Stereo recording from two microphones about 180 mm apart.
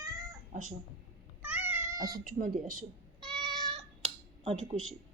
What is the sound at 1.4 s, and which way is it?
Cat, 10° right (ahead or behind).